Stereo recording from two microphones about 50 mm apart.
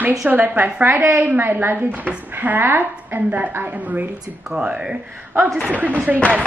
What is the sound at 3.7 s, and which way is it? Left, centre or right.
Speech, right.